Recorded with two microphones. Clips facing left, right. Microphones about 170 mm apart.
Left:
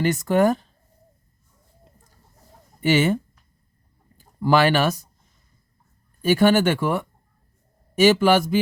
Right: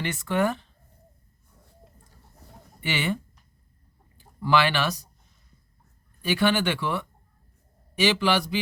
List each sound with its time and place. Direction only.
0.0 s speech: 40° left (ahead or behind)
2.8 s speech: 45° left (ahead or behind)
4.2 s speech: 45° left (ahead or behind)
6.2 s speech: 45° left (ahead or behind)